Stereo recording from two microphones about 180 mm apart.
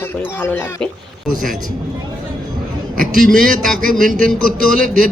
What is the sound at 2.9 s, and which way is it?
A man's voice, 50° right (ahead or behind).